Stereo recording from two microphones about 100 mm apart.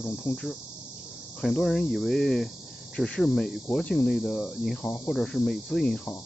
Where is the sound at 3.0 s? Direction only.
10° left (ahead or behind).